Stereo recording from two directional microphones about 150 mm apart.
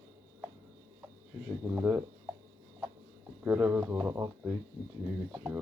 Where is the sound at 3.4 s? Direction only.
15° right (ahead or behind).